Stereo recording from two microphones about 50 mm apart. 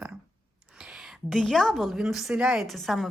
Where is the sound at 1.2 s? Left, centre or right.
Centre.